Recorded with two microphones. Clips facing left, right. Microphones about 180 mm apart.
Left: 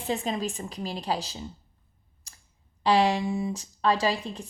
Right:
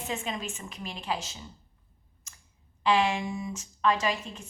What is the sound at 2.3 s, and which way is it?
Clicking, 35° left (ahead or behind).